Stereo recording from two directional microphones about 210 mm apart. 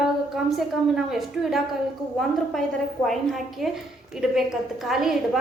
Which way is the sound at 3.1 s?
Centre (ahead or behind).